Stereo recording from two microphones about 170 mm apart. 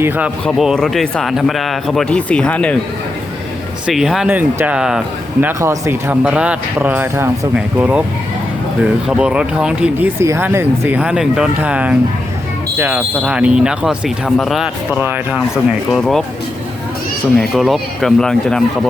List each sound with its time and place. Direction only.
0.4 s speech: centre (ahead or behind)
3.8 s speech: centre (ahead or behind)
17.3 s speech: centre (ahead or behind)